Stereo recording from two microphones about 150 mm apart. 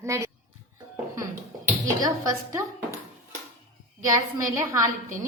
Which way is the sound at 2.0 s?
20° right (ahead or behind).